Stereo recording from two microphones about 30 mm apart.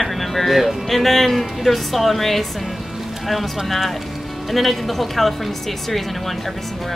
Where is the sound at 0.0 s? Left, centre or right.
Centre.